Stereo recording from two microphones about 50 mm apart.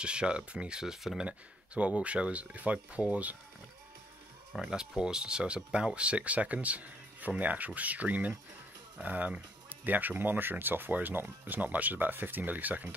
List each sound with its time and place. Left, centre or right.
0.0 s speech: centre
4.6 s speech: centre; by 12.9 s right